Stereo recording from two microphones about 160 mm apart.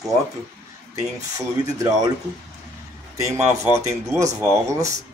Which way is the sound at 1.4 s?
20° right (ahead or behind).